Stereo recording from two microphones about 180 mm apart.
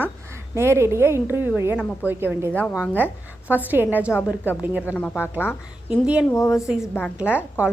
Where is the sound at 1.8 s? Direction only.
Centre (ahead or behind).